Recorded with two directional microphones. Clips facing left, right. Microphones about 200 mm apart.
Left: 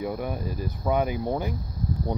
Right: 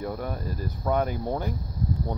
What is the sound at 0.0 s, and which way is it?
Speech, 10° left (ahead or behind).